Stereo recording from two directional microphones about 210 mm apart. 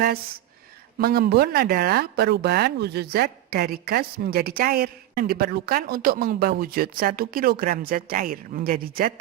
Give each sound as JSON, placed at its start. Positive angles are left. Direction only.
{"t": 0.0, "sound": "speech", "side_deg": -45}